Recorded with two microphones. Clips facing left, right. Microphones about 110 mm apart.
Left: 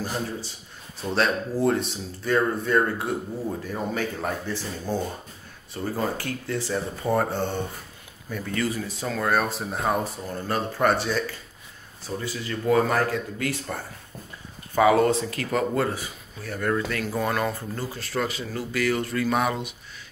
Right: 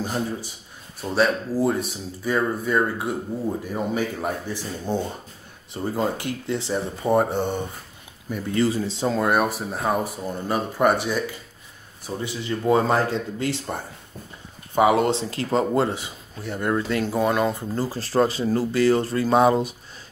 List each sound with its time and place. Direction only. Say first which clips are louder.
0.0 s speech: right 3 dB; 15° right (ahead or behind)
8.5 s speech: right 6 dB; 30° right (ahead or behind)
9.3 s speech: left 1 dB; 15° right (ahead or behind)
9.6 s speech: right 1 dB; 5° right (ahead or behind)
10.2 s speech: right 2 dB; 15° right (ahead or behind)
14.8 s speech: even; 20° right (ahead or behind)
17.7 s speech: right 7 dB; 35° right (ahead or behind)